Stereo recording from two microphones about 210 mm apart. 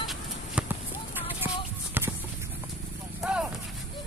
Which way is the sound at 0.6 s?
5° right (ahead or behind).